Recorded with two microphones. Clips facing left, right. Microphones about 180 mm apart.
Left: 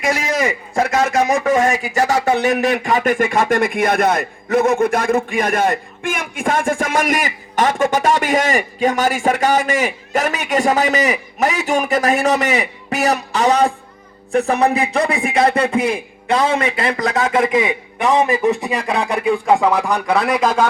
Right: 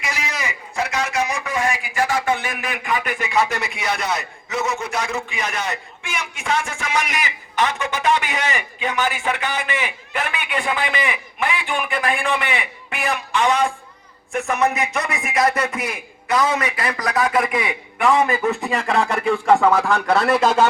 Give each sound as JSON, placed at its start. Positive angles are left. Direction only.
{"t": 0.0, "sound": "a man's voice", "side_deg": 50}
{"t": 20.1, "sound": "a man's voice", "side_deg": 0}